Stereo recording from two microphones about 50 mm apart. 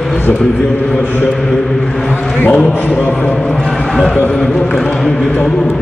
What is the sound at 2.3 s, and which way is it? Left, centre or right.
Speech, left.